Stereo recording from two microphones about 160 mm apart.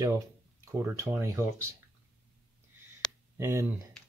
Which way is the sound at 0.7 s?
20° right (ahead or behind).